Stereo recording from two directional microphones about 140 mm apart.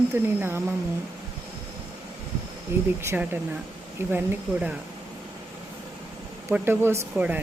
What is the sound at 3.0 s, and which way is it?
Speech, 15° right (ahead or behind).